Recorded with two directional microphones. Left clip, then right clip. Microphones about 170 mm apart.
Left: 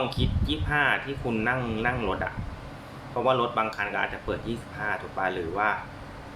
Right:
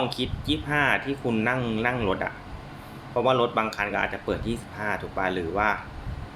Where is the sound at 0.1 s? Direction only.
30° right (ahead or behind).